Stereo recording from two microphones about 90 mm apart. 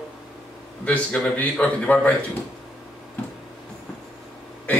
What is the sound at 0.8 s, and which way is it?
A man's voice, 20° left (ahead or behind).